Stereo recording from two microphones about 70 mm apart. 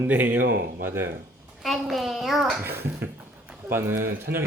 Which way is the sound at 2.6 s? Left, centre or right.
Right.